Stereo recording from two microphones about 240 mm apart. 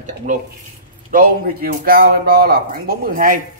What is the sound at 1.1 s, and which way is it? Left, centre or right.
A man's voice, right.